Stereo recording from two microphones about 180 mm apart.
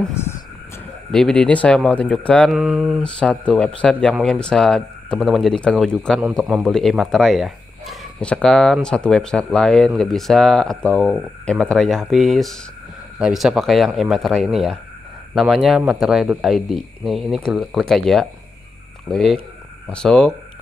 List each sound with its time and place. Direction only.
0.0 s speech: 15° left (ahead or behind)